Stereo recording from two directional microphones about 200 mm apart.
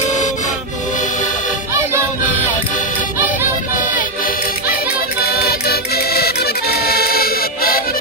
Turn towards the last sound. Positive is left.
turn(degrees=50)  # may be behind; listen again after turning